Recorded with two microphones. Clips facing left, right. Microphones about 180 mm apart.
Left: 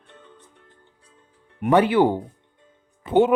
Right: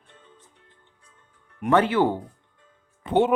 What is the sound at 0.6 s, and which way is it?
Music, 40° left (ahead or behind).